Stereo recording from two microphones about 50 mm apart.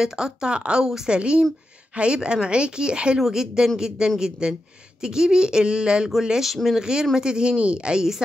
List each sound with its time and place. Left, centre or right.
0.0 s speech: centre
6.8 s speech: centre